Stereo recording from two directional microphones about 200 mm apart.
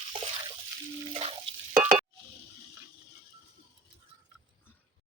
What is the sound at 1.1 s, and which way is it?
Drip, 30° right (ahead or behind).